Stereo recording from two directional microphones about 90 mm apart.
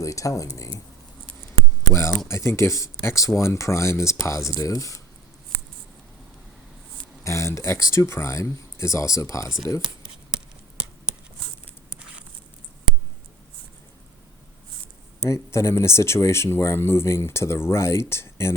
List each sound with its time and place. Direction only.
0.0 s speech: 35° left (ahead or behind)
7.3 s speech: 35° left (ahead or behind)
11.9 s a sound: 15° right (ahead or behind)
15.3 s speech: 30° left (ahead or behind)